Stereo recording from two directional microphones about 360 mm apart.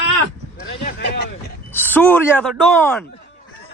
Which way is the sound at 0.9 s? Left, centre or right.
Left.